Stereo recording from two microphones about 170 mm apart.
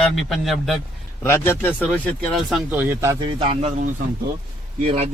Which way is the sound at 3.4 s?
35° right (ahead or behind).